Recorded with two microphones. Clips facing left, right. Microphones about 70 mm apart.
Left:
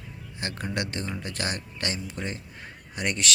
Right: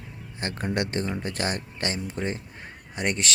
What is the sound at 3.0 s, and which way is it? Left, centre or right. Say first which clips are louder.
Mantra: right 1 dB; right.